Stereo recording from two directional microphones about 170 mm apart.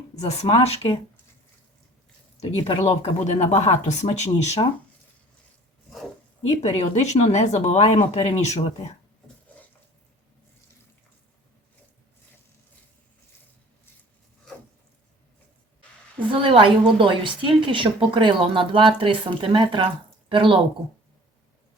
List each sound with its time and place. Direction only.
0.2 s speech: 40° left (ahead or behind)
2.7 s speech: 45° left (ahead or behind)
6.4 s speech: 40° left (ahead or behind)
16.1 s a woman's voice: 30° right (ahead or behind)